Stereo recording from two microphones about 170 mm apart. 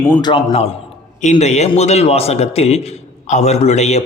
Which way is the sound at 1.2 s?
40° left (ahead or behind).